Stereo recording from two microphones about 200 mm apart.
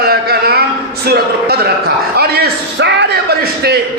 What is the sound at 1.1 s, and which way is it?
A man's voice, 55° right (ahead or behind).